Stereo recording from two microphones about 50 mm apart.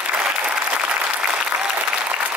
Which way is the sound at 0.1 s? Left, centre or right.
Right.